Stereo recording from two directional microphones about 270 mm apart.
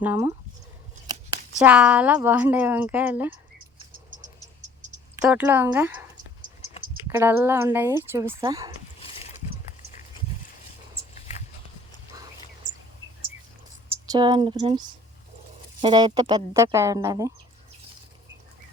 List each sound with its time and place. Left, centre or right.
0.0 s speech: centre
1.5 s speech: centre
3.9 s frog: right
5.2 s speech: centre
7.1 s speech: centre
9.0 s a sound: left
14.1 s speech: centre